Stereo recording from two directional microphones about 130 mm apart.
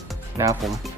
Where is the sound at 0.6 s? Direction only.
Centre (ahead or behind).